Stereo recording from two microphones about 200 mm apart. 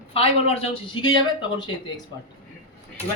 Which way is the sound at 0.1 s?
30° left (ahead or behind).